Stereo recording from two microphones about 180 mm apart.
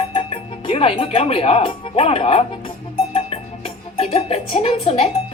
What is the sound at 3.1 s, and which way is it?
Music, 35° left (ahead or behind).